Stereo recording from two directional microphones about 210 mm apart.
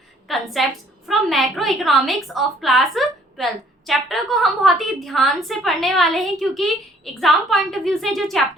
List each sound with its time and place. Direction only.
0.3 s a woman's voice: centre (ahead or behind)